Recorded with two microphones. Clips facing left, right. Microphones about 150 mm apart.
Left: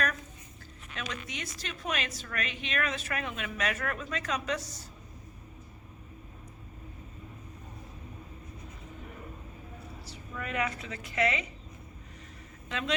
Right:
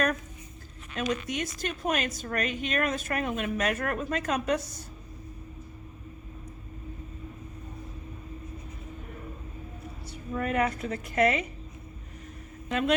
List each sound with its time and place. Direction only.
0.9 s a woman's voice: 45° right (ahead or behind)
10.3 s a woman's voice: 50° right (ahead or behind)
12.6 s a woman's voice: 50° right (ahead or behind)